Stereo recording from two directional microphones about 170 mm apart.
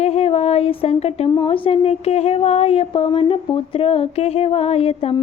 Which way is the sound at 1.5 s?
35° left (ahead or behind).